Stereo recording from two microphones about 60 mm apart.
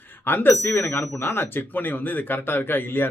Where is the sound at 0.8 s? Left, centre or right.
Left.